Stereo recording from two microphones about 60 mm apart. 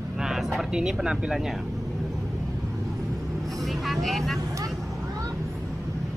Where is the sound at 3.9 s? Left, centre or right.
Centre.